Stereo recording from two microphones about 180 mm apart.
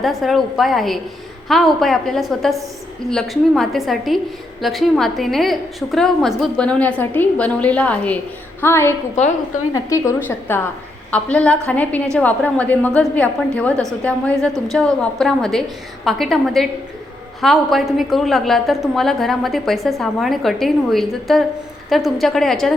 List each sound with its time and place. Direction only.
0.0 s a woman's voice: centre (ahead or behind)